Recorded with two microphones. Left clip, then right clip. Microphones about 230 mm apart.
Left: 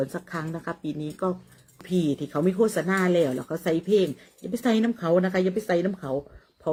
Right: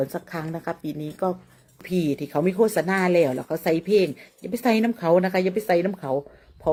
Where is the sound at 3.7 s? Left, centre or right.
Centre.